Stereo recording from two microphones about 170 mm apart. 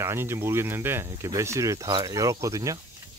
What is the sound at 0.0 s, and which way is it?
Speech, 15° right (ahead or behind).